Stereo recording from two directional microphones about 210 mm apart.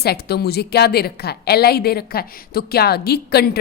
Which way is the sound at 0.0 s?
50° left (ahead or behind).